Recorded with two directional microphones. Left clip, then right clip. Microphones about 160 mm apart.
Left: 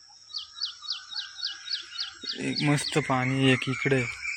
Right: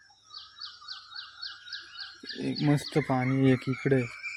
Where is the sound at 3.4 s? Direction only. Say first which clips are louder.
Left 3 dB; 25° right (ahead or behind).